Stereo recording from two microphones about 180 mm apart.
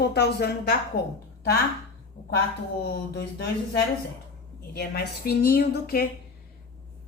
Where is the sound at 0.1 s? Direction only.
65° left (ahead or behind).